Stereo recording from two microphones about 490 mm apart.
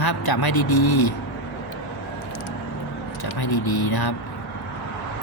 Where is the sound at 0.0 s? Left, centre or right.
Left.